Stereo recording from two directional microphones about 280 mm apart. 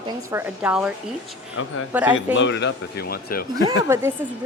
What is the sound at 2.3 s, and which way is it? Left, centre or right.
A man's voice, left.